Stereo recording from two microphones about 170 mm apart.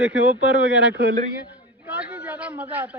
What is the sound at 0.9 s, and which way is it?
Speech, 75° right (ahead or behind).